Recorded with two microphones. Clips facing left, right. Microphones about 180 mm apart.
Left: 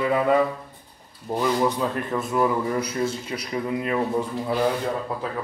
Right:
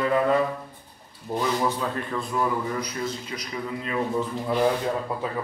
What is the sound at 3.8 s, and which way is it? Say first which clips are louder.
Speech: left 1 dB; 15° left (ahead or behind).